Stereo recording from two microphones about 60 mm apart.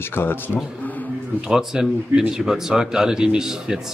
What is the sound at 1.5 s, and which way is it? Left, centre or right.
Speech, centre.